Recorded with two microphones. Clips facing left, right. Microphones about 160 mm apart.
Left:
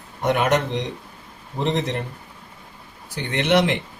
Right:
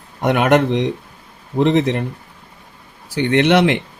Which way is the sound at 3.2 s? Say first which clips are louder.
Right 6 dB; 65° right (ahead or behind).